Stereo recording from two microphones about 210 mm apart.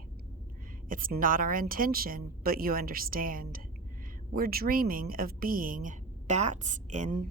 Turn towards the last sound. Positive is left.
turn(degrees=-35)  # may be behind; listen again after turning